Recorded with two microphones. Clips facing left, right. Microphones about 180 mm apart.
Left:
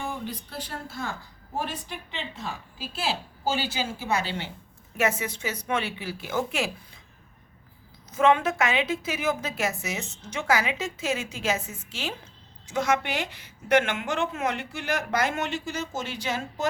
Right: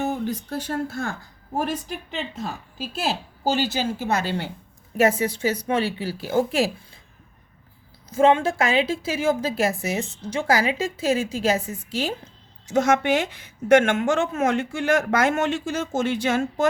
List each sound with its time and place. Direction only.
0.0 s a woman's voice: 45° right (ahead or behind)
8.1 s a woman's voice: 30° right (ahead or behind); by 16.6 s 50° right (ahead or behind)